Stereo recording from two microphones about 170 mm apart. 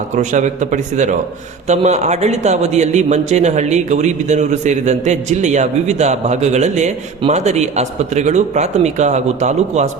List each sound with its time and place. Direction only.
0.2 s speech: 45° right (ahead or behind)